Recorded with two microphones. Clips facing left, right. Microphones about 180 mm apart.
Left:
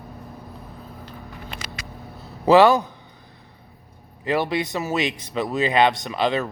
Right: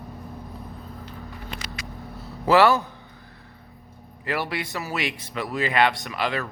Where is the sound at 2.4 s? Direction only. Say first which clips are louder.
Left 4 dB; 20° left (ahead or behind).